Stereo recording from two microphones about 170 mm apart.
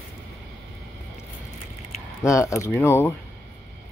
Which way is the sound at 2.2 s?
20° left (ahead or behind).